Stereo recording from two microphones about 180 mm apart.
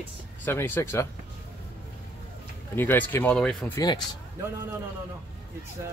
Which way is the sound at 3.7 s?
20° left (ahead or behind).